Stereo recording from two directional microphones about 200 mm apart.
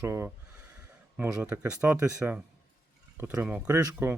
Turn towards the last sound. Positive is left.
turn(degrees=-10)  # may be behind; listen again after turning